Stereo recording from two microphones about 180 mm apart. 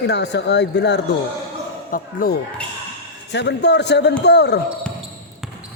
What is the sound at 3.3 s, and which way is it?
Speech, 70° left (ahead or behind).